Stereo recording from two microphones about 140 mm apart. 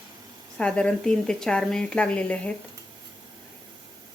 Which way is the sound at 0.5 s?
5° left (ahead or behind).